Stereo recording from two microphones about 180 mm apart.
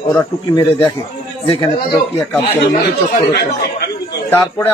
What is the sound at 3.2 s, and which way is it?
Speech, 60° left (ahead or behind).